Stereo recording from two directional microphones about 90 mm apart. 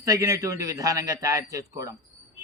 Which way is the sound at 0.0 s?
35° right (ahead or behind).